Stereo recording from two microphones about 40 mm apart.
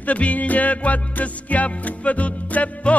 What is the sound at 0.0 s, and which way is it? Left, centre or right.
Music, left.